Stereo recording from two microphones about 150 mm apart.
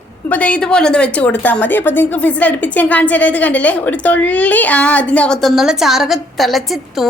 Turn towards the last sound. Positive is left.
turn(degrees=0)  # may be behind; listen again after turning